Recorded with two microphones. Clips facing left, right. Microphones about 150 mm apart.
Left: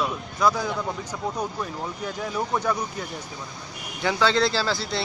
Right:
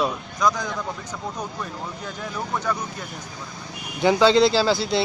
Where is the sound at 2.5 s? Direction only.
10° left (ahead or behind).